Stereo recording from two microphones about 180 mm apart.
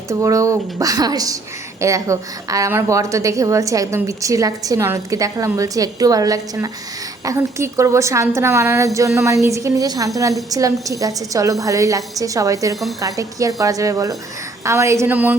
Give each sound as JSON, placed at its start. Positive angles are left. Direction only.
{"t": 0.1, "sound": "a woman's voice", "side_deg": -15}